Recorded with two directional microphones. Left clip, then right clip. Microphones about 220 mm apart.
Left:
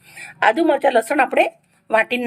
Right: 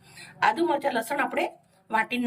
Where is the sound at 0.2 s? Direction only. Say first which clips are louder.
Left 7 dB; 15° left (ahead or behind).